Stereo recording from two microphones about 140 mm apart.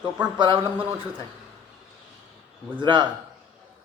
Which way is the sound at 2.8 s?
35° right (ahead or behind).